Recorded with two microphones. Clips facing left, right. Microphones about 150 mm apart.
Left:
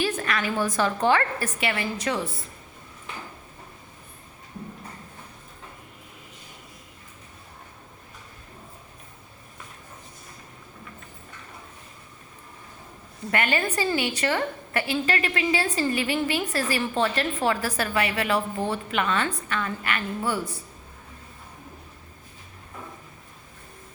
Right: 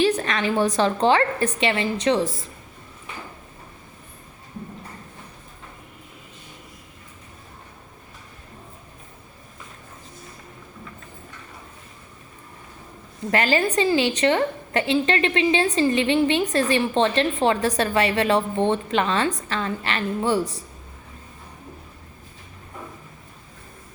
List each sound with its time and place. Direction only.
0.1 s a sound: 35° right (ahead or behind)
0.8 s a woman's voice: 25° right (ahead or behind)
13.3 s a woman's voice: 30° right (ahead or behind)